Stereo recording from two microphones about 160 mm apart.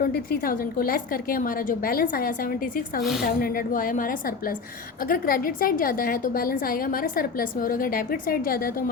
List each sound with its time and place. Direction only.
0.0 s a woman's voice: 65° left (ahead or behind)